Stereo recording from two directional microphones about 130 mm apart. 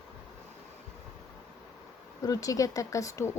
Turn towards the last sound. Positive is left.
turn(degrees=25)  # may be behind; listen again after turning